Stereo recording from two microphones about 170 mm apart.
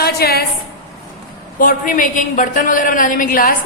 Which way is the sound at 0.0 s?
65° left (ahead or behind).